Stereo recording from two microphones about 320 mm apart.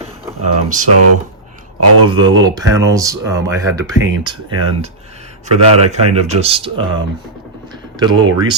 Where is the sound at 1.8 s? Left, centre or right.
Right.